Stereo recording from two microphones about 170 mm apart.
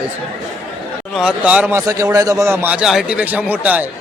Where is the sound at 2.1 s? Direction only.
20° right (ahead or behind).